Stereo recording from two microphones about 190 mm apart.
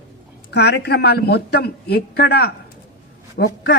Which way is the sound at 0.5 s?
60° left (ahead or behind).